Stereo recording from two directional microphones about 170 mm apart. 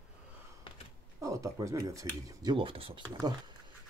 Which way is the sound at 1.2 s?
20° right (ahead or behind).